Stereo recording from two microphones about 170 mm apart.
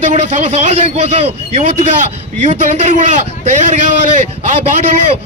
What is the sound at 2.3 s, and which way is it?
Speech, 45° right (ahead or behind).